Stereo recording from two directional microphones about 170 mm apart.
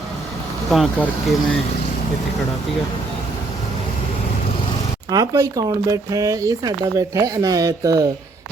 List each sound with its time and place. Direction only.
0.7 s speech: centre (ahead or behind)
5.1 s speech: 20° right (ahead or behind)